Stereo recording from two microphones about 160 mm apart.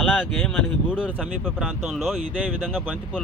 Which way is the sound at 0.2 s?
Centre (ahead or behind).